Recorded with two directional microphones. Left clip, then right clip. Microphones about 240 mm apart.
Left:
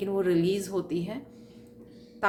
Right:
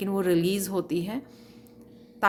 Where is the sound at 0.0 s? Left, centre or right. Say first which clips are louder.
Right 1 dB; right.